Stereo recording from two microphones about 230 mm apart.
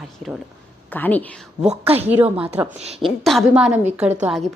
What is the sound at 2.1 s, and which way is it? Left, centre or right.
A woman's voice, centre.